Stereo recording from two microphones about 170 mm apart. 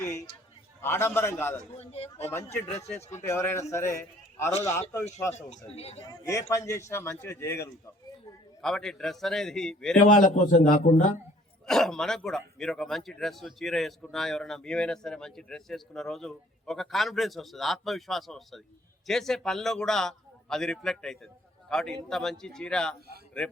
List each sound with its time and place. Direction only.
0.0 s a sound: 15° left (ahead or behind)
0.8 s a man's voice: 15° left (ahead or behind)
1.7 s a man's voice: 35° left (ahead or behind)
2.1 s a man's voice: 15° left (ahead or behind)
5.3 s a man's voice: 40° left (ahead or behind)
6.0 s a man's voice: 20° left (ahead or behind)
8.6 s speech: centre (ahead or behind)
10.2 s a man's voice: 50° left (ahead or behind)
11.6 s speech: centre (ahead or behind)